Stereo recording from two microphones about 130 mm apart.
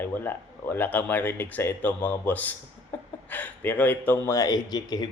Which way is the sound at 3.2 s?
15° left (ahead or behind).